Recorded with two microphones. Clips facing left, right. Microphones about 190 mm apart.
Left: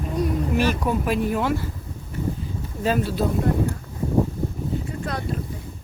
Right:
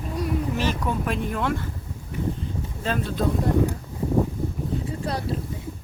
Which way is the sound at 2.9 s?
5° left (ahead or behind).